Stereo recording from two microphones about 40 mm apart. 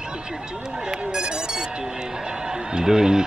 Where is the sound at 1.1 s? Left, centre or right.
Centre.